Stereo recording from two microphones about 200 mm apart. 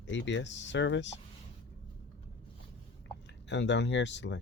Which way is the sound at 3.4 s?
60° left (ahead or behind).